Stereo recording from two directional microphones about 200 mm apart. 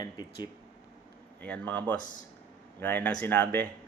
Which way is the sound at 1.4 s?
5° left (ahead or behind).